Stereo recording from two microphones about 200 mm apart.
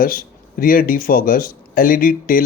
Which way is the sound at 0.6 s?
45° left (ahead or behind).